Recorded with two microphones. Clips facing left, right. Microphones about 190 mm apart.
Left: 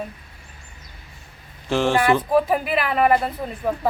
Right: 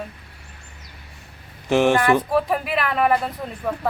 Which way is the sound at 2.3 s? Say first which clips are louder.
Left 2 dB; centre (ahead or behind).